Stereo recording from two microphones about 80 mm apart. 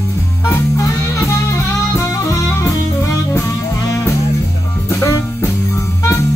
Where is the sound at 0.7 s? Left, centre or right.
Left.